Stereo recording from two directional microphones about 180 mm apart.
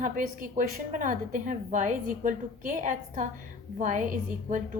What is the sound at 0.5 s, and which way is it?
A woman's voice, 45° right (ahead or behind).